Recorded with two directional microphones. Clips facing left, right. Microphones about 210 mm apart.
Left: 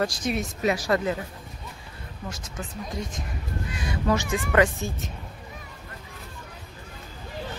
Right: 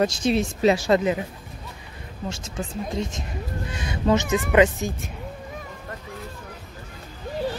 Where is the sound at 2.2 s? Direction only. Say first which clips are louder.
Right 5 dB; 25° right (ahead or behind).